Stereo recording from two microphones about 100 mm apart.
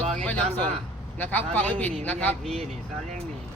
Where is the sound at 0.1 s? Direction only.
10° left (ahead or behind).